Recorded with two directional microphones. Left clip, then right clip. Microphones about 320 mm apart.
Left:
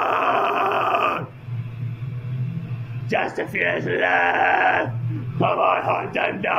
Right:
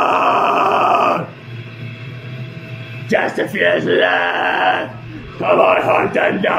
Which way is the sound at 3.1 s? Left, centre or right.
Centre.